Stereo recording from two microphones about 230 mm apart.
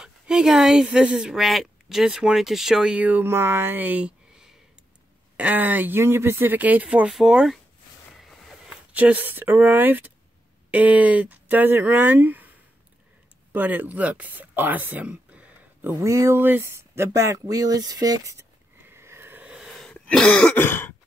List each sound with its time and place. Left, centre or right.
0.0 s speech: centre
8.2 s a sound: centre
10.7 s speech: centre
13.5 s speech: centre